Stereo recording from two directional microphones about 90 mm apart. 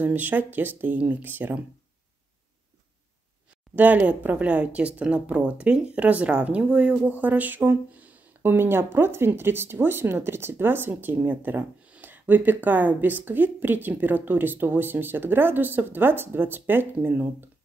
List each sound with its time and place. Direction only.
0.0 s speech: 20° right (ahead or behind)
3.7 s speech: 20° right (ahead or behind)